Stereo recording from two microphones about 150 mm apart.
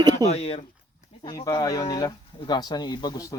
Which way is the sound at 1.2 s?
25° left (ahead or behind).